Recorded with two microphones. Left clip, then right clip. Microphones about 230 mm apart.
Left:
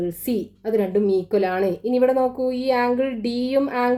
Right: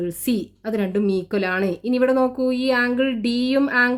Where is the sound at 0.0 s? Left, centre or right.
Right.